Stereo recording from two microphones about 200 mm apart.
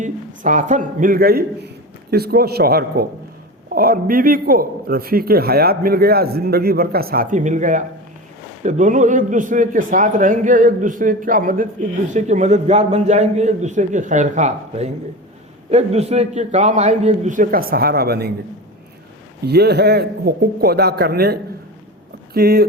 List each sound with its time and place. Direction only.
0.0 s a man's voice: 40° right (ahead or behind)
19.5 s a man's voice: 55° right (ahead or behind)